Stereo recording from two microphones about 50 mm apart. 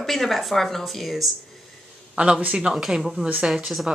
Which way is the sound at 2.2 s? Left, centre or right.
Right.